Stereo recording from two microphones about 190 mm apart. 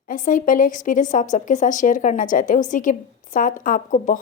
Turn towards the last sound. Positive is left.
turn(degrees=45)  # may be behind; listen again after turning